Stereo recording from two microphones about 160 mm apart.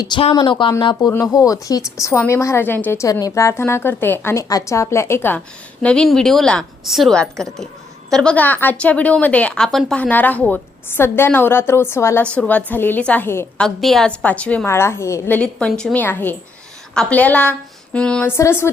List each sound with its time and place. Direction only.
0.0 s a woman's voice: 30° left (ahead or behind); by 13.7 s 15° left (ahead or behind)
13.7 s a woman's voice: 5° left (ahead or behind)
15.4 s a woman's voice: 5° left (ahead or behind)